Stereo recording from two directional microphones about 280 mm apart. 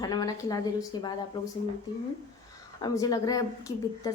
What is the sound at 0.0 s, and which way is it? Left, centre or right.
A woman's voice, centre.